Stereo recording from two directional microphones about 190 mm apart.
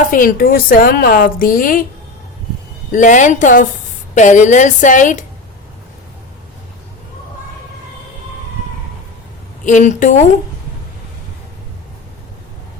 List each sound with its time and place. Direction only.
0.1 s a woman's voice: 45° left (ahead or behind)
2.9 s a woman's voice: 40° left (ahead or behind)
9.6 s a woman's voice: 40° left (ahead or behind)